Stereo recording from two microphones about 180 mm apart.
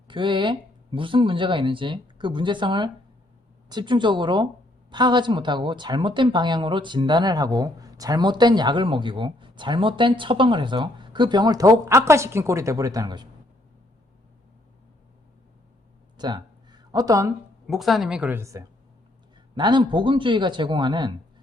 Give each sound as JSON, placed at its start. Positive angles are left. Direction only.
{"t": 0.1, "sound": "speech", "side_deg": -25}
{"t": 16.1, "sound": "a sound", "side_deg": -25}
{"t": 17.7, "sound": "a woman's voice", "side_deg": 0}